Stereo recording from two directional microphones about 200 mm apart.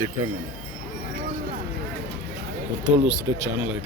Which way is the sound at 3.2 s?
15° right (ahead or behind).